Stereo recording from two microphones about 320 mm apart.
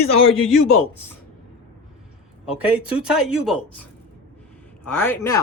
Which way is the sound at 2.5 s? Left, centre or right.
Centre.